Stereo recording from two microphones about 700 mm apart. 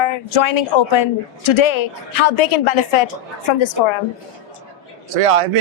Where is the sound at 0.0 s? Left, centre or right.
Left.